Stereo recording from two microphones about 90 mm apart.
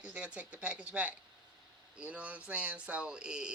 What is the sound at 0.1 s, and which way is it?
Speech, 15° right (ahead or behind).